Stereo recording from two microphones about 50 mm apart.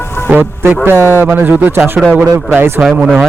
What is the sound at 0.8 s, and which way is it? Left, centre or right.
Speech, right.